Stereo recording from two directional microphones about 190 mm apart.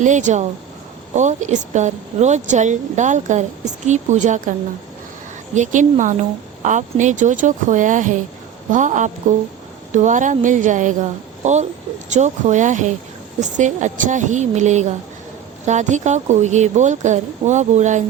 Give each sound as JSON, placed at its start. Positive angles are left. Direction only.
{"t": 0.0, "sound": "speech", "side_deg": -40}
{"t": 5.5, "sound": "speech", "side_deg": -40}